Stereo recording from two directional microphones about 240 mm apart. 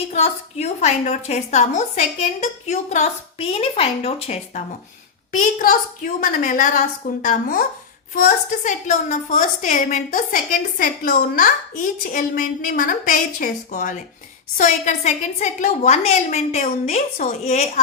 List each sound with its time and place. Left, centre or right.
0.1 s a woman's voice: left
6.1 s a woman's voice: left